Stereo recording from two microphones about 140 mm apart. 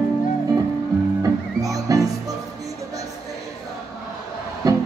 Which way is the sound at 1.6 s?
25° right (ahead or behind).